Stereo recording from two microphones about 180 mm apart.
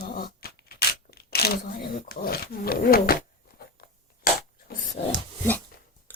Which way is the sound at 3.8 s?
60° left (ahead or behind).